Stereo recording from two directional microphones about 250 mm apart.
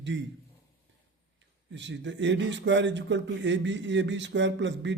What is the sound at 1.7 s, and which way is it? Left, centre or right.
A man's voice, right.